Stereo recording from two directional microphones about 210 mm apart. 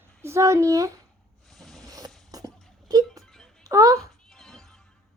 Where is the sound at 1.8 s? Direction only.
15° right (ahead or behind).